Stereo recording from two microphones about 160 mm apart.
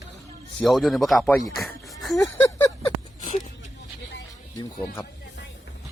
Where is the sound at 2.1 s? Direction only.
20° left (ahead or behind).